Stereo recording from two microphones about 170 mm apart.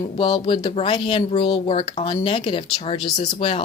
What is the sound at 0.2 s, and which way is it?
A woman's voice, 30° left (ahead or behind).